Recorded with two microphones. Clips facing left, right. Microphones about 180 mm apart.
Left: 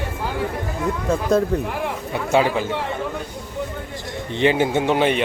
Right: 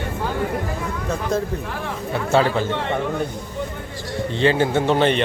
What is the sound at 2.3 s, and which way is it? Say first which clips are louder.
Speech: even; 10° left (ahead or behind).